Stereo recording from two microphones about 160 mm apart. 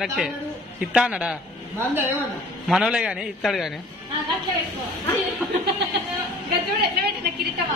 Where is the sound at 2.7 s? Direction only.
5° right (ahead or behind).